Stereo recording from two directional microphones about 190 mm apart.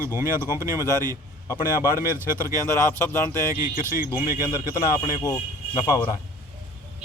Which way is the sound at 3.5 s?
15° right (ahead or behind).